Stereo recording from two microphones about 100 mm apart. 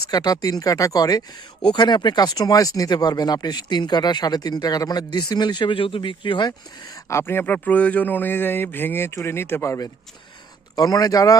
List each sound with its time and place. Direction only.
0.1 s speech: 40° left (ahead or behind); by 6.5 s 55° left (ahead or behind)
6.9 s speech: 25° left (ahead or behind)